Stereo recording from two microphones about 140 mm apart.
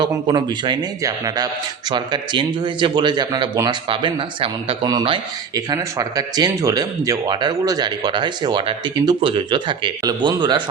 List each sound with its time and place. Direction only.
0.0 s speech: 30° right (ahead or behind)